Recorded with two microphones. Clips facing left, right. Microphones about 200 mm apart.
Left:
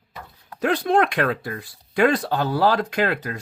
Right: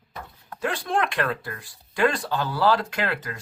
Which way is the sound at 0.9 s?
55° left (ahead or behind).